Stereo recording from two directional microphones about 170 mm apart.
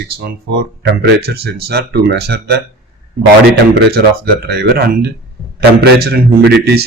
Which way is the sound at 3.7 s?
70° right (ahead or behind).